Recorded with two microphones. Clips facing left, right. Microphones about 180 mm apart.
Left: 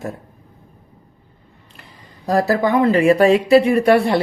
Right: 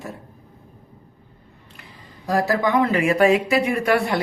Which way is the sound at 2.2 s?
35° left (ahead or behind).